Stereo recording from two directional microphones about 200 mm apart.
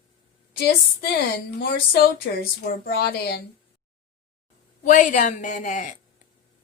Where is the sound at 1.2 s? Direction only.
50° left (ahead or behind).